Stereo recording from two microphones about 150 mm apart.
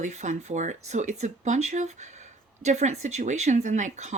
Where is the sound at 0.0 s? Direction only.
50° right (ahead or behind).